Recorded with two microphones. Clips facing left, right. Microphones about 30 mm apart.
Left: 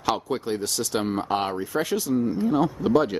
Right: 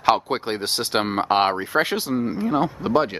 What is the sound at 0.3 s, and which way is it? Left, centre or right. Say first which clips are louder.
Speech: right 2 dB; right.